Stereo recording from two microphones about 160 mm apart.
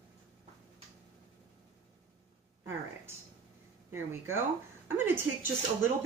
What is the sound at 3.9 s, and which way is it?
A woman's voice, 15° right (ahead or behind).